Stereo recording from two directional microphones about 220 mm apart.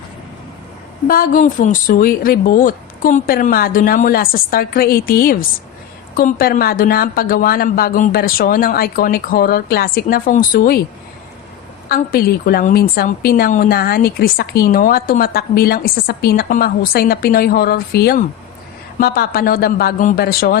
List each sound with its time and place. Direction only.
1.0 s speech: 40° left (ahead or behind)
11.9 s a woman's voice: 40° left (ahead or behind)